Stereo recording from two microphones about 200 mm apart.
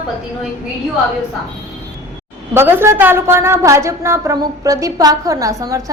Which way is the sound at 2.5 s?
10° right (ahead or behind).